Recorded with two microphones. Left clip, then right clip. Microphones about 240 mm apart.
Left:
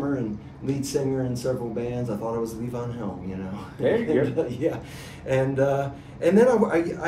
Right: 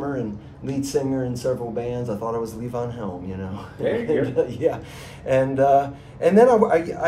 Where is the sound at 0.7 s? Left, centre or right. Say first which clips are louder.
Right 2 dB; centre.